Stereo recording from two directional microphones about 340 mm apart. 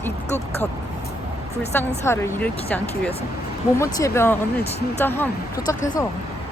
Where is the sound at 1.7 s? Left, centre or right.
Centre.